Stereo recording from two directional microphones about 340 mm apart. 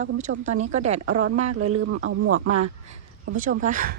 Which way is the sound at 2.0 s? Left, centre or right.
Right.